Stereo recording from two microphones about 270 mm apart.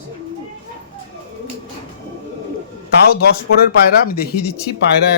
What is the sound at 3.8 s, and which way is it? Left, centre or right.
Speech, left.